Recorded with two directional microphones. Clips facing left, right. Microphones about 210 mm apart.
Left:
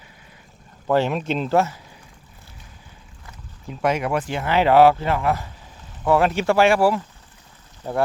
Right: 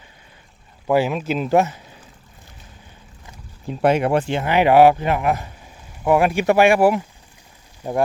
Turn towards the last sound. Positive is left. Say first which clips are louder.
# right 2 dB
turn(degrees=-15)  # may be behind; listen again after turning